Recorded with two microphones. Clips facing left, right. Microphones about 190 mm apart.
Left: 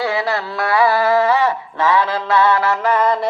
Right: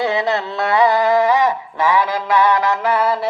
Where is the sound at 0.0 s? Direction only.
20° right (ahead or behind).